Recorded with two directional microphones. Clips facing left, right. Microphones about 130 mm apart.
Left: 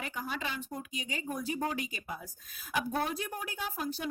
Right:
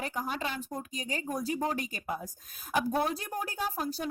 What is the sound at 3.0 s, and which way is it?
Speech, 30° right (ahead or behind).